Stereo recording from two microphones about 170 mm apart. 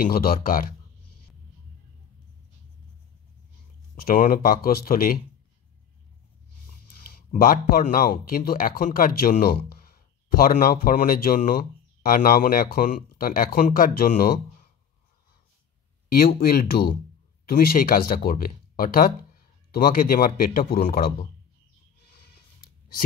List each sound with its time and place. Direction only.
0.0 s speech: 60° left (ahead or behind)
3.9 s speech: 60° left (ahead or behind)
7.3 s speech: 55° left (ahead or behind)
16.1 s speech: 60° left (ahead or behind)
22.3 s a sound: 65° left (ahead or behind)